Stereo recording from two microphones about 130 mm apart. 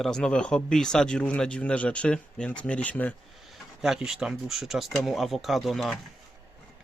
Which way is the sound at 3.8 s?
5° right (ahead or behind).